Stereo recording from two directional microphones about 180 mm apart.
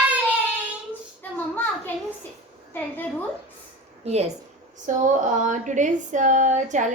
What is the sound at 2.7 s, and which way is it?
Speech, 10° left (ahead or behind).